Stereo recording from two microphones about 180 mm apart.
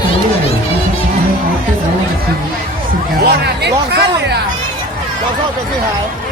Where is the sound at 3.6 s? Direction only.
65° right (ahead or behind).